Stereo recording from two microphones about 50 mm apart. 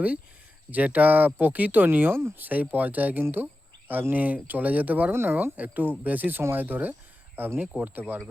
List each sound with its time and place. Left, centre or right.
0.7 s speech: right
2.4 s speech: right
3.3 s a sound: right
4.1 s speech: right
5.1 s speech: right